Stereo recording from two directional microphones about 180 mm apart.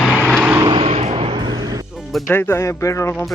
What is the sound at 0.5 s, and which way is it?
Vehicle, 25° right (ahead or behind).